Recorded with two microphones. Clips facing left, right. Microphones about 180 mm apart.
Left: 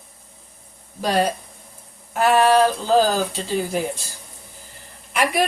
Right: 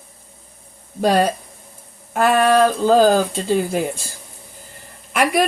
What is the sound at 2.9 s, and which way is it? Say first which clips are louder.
Speech: right 4 dB; 50° right (ahead or behind).